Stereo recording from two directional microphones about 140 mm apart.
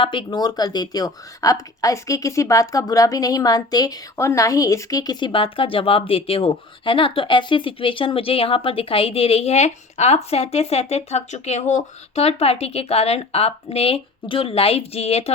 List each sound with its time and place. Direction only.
0.0 s speech: 35° left (ahead or behind)